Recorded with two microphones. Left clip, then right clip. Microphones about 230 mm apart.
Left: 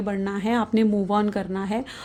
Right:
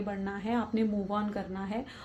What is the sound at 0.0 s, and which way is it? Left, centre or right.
Speech, left.